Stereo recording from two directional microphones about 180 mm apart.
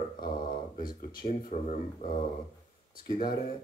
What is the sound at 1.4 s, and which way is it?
Speech, 40° left (ahead or behind).